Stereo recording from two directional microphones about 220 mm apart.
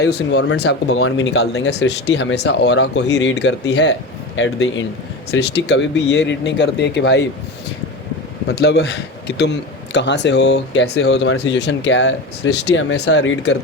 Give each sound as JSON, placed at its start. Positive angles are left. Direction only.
{"t": 0.1, "sound": "a man's voice", "side_deg": 50}
{"t": 4.4, "sound": "speech", "side_deg": 65}
{"t": 5.4, "sound": "a man's voice", "side_deg": 50}
{"t": 8.4, "sound": "a man's voice", "side_deg": 45}